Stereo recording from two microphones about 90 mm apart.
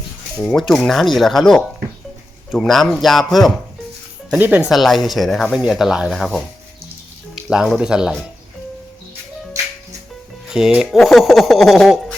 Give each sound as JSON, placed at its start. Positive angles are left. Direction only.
{"t": 0.5, "sound": "speech", "side_deg": 5}
{"t": 4.3, "sound": "speech", "side_deg": -20}
{"t": 4.7, "sound": "speech", "side_deg": 0}
{"t": 7.5, "sound": "speech", "side_deg": -5}
{"t": 10.8, "sound": "speech", "side_deg": 0}